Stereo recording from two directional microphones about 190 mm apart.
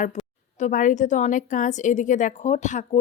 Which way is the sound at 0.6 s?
45° left (ahead or behind).